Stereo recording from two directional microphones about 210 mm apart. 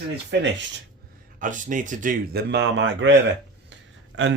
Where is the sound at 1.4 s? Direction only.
40° right (ahead or behind).